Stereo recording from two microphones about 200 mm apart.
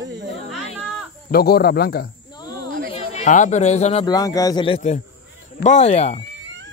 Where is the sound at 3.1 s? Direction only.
35° left (ahead or behind).